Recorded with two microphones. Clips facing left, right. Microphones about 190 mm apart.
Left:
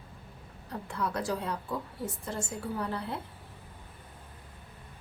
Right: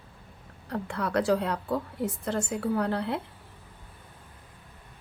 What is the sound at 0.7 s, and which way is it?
A woman's voice, 65° right (ahead or behind).